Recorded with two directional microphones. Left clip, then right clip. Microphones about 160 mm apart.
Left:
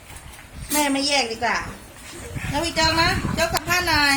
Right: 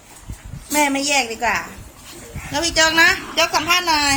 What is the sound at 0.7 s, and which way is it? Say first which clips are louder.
Speech: right 3 dB; 20° right (ahead or behind).